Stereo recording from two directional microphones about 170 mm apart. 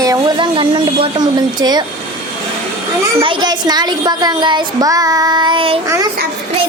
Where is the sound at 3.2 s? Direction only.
30° right (ahead or behind).